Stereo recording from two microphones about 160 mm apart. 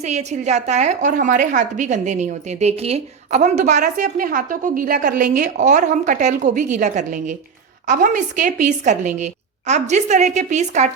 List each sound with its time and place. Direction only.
0.0 s a woman's voice: 45° right (ahead or behind)